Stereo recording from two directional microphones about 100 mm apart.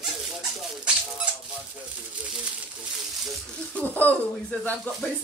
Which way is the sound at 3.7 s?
20° left (ahead or behind).